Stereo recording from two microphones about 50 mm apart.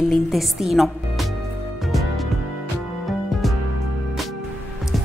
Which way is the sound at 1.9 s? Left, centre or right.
Centre.